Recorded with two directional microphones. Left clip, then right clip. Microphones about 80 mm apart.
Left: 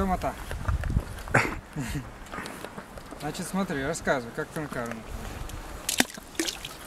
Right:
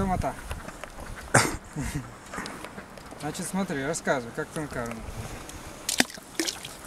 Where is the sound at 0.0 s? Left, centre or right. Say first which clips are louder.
Even; centre.